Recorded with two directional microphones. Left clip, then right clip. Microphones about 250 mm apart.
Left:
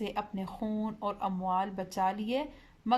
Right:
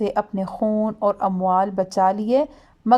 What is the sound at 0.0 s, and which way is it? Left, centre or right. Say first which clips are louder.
A woman's voice: right 13 dB; right.